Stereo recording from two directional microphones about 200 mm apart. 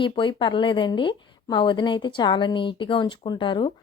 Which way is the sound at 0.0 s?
25° left (ahead or behind).